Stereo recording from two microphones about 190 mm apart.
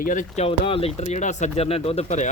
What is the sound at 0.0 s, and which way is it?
Speech, 45° left (ahead or behind).